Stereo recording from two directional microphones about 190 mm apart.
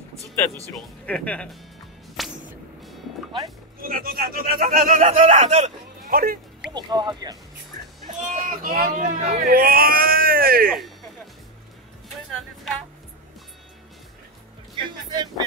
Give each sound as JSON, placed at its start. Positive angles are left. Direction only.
{"t": 0.7, "sound": "speech", "side_deg": 5}
{"t": 2.2, "sound": "music", "side_deg": 0}
{"t": 3.8, "sound": "speech", "side_deg": -50}
{"t": 6.1, "sound": "speech", "side_deg": -50}
{"t": 6.7, "sound": "speech", "side_deg": -20}
{"t": 8.4, "sound": "speech", "side_deg": -50}
{"t": 12.3, "sound": "a sound", "side_deg": 0}
{"t": 15.0, "sound": "speech", "side_deg": -20}